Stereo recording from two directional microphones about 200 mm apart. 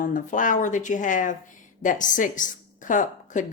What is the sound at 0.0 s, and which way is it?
Speech, 40° left (ahead or behind).